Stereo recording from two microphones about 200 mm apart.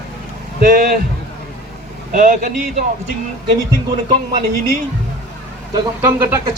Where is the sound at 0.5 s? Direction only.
50° right (ahead or behind).